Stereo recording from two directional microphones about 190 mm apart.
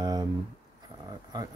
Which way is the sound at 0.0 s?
20° right (ahead or behind).